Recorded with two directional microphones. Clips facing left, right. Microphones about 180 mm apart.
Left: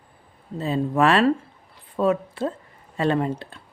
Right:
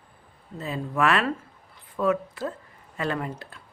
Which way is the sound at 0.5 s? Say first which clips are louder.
Left 7 dB; 30° left (ahead or behind).